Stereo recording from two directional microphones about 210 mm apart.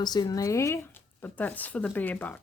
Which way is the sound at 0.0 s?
20° left (ahead or behind).